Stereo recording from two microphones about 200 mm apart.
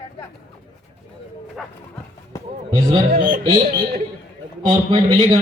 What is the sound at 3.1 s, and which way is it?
Speech, 40° right (ahead or behind).